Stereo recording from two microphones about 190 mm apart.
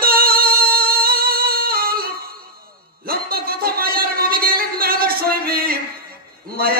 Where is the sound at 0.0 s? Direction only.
50° right (ahead or behind).